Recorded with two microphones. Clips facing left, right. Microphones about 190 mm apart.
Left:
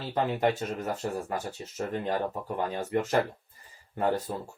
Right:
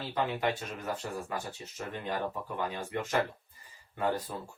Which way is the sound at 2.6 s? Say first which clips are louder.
Left 6 dB; 40° left (ahead or behind).